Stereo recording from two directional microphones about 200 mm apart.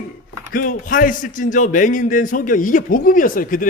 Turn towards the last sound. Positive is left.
turn(degrees=45)  # may be behind; listen again after turning